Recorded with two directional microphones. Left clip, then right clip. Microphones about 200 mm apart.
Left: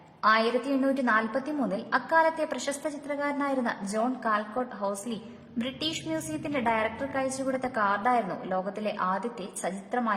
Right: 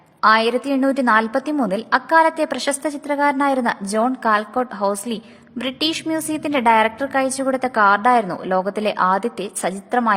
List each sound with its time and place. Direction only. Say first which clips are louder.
0.2 s a woman's voice: right 9 dB; 35° right (ahead or behind)